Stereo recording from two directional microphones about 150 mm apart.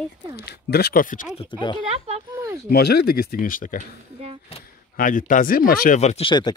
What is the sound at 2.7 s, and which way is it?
Speech, 90° left.